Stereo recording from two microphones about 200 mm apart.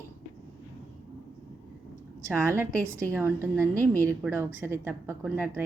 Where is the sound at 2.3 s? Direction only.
10° right (ahead or behind).